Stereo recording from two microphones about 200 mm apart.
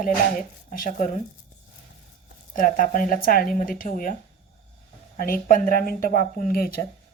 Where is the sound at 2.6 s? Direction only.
40° left (ahead or behind).